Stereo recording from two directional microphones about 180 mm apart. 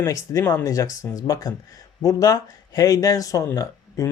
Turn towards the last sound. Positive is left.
turn(degrees=20)  # may be behind; listen again after turning